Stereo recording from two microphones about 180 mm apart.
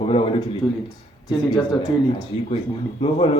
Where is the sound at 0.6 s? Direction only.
20° left (ahead or behind).